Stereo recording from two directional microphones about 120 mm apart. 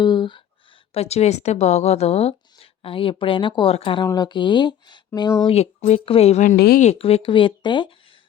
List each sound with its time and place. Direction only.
0.0 s a sound: 40° left (ahead or behind)
0.9 s speech: 60° left (ahead or behind)
4.0 s speech: 35° left (ahead or behind)
5.5 s speech: 60° left (ahead or behind); by 6.9 s 90° left
7.0 s speech: 50° left (ahead or behind)